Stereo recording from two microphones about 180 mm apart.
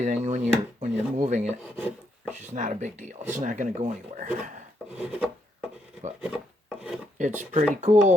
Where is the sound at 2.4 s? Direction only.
40° right (ahead or behind).